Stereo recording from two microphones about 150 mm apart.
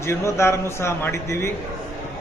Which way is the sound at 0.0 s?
20° left (ahead or behind).